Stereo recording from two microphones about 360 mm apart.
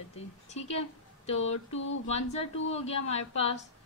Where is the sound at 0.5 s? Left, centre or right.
Centre.